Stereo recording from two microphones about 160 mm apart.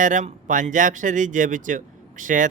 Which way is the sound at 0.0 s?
55° right (ahead or behind).